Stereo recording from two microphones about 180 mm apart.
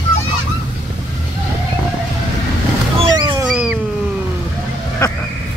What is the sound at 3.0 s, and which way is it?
Boat, 25° right (ahead or behind).